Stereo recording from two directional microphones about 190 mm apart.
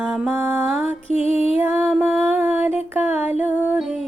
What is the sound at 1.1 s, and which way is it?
Music, 30° left (ahead or behind).